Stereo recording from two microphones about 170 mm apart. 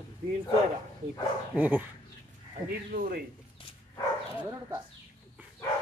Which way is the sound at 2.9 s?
55° right (ahead or behind).